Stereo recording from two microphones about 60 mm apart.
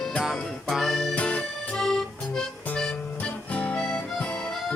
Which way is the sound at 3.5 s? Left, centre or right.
Left.